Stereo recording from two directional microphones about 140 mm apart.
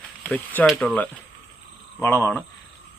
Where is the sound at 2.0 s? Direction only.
20° left (ahead or behind).